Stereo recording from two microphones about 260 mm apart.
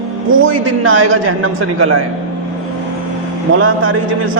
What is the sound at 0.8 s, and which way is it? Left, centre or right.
A man's voice, right.